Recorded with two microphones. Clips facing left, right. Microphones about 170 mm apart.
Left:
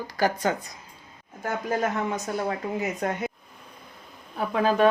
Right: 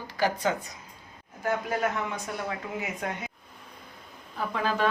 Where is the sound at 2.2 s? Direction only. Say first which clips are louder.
Left 5 dB; 40° left (ahead or behind).